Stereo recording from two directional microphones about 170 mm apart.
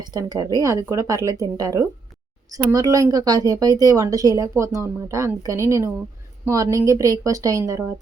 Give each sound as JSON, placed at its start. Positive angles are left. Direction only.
{"t": 0.0, "sound": "a woman's voice", "side_deg": -25}